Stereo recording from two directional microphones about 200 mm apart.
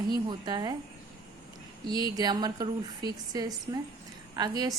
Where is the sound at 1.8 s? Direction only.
20° right (ahead or behind).